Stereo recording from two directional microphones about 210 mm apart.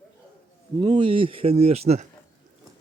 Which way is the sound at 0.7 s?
20° right (ahead or behind).